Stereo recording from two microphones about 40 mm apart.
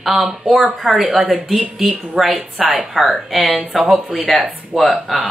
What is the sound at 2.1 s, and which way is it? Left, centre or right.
Speech, centre.